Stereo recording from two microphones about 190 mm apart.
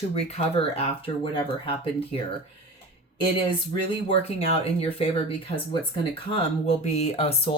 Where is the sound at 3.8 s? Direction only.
30° left (ahead or behind).